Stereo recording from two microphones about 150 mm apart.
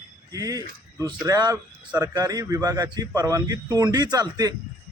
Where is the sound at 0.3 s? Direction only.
25° right (ahead or behind).